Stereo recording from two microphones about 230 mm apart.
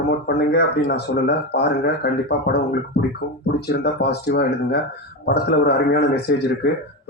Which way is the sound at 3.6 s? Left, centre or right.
Left.